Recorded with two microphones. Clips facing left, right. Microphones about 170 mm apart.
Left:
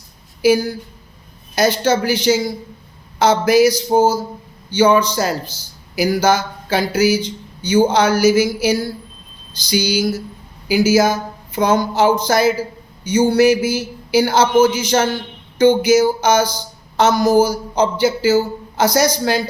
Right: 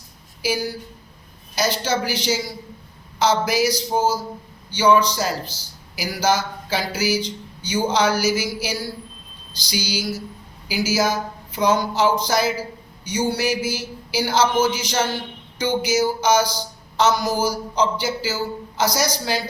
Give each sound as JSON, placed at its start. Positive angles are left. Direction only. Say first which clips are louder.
{"t": 0.4, "sound": "speech", "louder": "left 10 dB", "side_deg": 50}